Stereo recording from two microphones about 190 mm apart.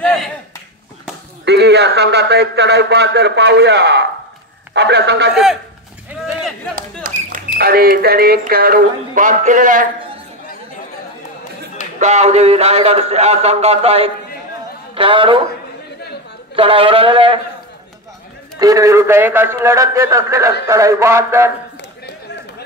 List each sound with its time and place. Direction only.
0.0 s a sound: centre (ahead or behind)
1.4 s a man's voice: 60° right (ahead or behind)
5.3 s speech: centre (ahead or behind)
7.0 s speech: 45° right (ahead or behind)
12.0 s a man's voice: 35° right (ahead or behind)
16.5 s speech: 30° right (ahead or behind)
18.6 s a man's voice: 20° right (ahead or behind)